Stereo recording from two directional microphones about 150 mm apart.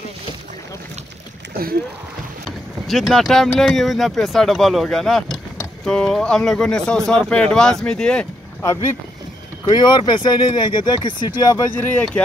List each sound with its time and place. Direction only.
2.9 s speech: centre (ahead or behind)
9.7 s speech: 30° left (ahead or behind)
11.7 s speech: 10° left (ahead or behind)